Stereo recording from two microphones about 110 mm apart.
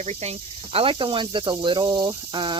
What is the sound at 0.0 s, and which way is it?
Speech, 80° right.